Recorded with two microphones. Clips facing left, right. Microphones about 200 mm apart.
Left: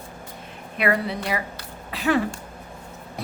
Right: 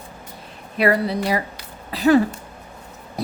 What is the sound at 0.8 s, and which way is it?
A woman's voice, 35° right (ahead or behind).